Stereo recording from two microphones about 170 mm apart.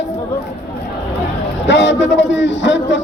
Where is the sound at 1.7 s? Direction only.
90° left.